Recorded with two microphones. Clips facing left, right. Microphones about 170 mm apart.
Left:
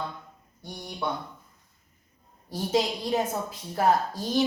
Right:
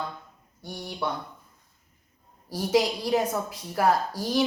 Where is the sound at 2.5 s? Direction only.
25° left (ahead or behind).